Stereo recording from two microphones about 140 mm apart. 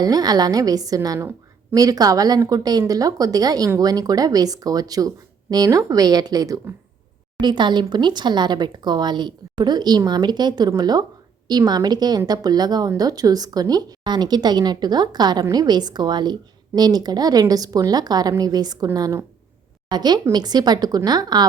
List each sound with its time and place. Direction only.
0.0 s a woman's voice: 30° right (ahead or behind)